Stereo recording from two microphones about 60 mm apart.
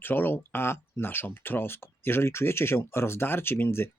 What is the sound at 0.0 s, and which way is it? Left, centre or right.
Speech, left.